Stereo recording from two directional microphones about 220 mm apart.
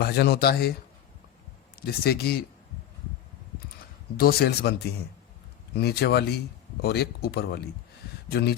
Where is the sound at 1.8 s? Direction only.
45° left (ahead or behind).